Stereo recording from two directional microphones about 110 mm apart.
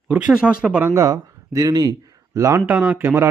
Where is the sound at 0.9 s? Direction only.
35° right (ahead or behind).